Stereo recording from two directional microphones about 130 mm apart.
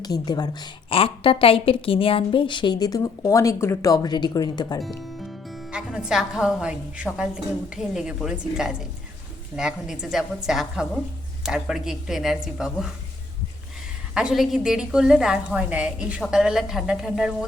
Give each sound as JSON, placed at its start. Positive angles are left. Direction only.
{"t": 0.0, "sound": "a woman's voice", "side_deg": 30}
{"t": 0.9, "sound": "a woman's voice", "side_deg": 45}
{"t": 5.7, "sound": "a woman's voice", "side_deg": -5}
{"t": 14.1, "sound": "a woman's voice", "side_deg": -5}